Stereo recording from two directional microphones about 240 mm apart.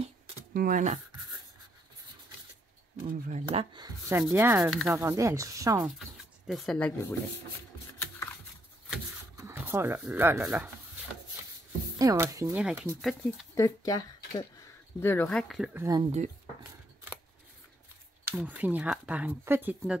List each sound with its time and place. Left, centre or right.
0.5 s speech: right
3.0 s speech: right; by 4.2 s centre
4.2 s sanding: centre
5.9 s speech: centre
8.0 s a sound: centre
9.4 s speech: centre
12.0 s sanding: centre
13.2 s speech: centre
16.0 s speech: right
18.2 s sanding: centre